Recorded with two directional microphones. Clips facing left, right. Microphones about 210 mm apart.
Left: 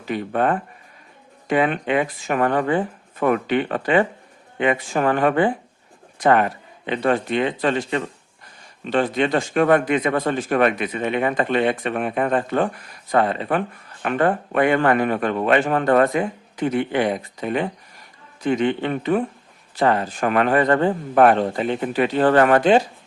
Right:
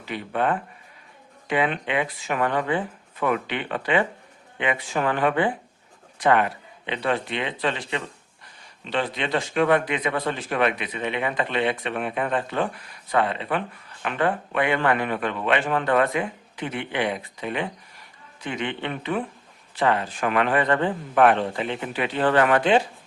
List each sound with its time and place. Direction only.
0.0 s speech: 45° left (ahead or behind)